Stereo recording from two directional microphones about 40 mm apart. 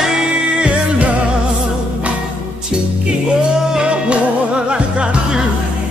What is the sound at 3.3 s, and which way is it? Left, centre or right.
Music, right.